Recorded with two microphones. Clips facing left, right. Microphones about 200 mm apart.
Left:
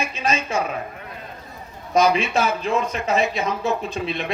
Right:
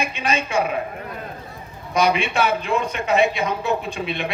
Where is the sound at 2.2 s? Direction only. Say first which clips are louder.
Even; 30° right (ahead or behind).